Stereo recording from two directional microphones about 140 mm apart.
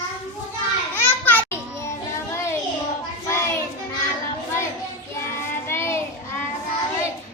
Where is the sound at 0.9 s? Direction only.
15° left (ahead or behind).